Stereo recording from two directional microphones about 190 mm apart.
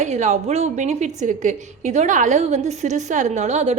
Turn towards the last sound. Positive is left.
turn(degrees=-35)  # may be behind; listen again after turning